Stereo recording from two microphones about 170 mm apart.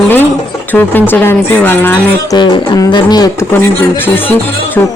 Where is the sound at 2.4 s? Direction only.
25° left (ahead or behind).